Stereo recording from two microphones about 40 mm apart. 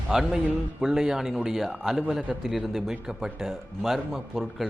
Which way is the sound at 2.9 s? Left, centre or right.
Centre.